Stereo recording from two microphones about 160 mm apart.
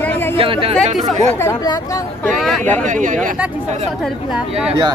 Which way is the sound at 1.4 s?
20° left (ahead or behind).